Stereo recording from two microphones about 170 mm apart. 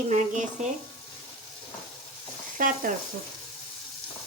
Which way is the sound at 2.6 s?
50° right (ahead or behind).